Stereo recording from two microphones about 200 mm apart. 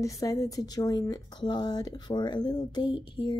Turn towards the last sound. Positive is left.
turn(degrees=25)  # may be behind; listen again after turning